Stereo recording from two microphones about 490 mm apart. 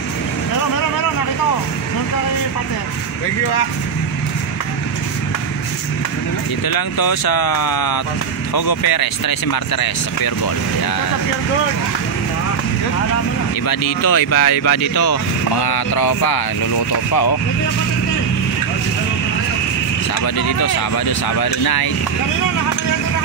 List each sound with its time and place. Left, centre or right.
6.7 s speech: left
13.7 s speech: left
20.3 s speech: left